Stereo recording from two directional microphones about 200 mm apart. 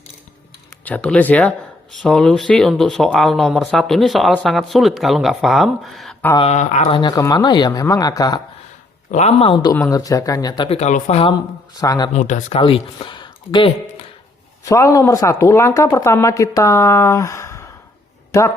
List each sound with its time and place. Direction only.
0.9 s speech: 5° left (ahead or behind)
6.4 s speech: 35° left (ahead or behind)
7.0 s speech: 20° left (ahead or behind)
9.1 s speech: 30° left (ahead or behind)
9.7 s speech: 15° left (ahead or behind)
10.6 s speech: 30° left (ahead or behind)
11.8 s speech: 20° left (ahead or behind)
12.1 s speech: 35° left (ahead or behind); by 18.5 s 15° left (ahead or behind)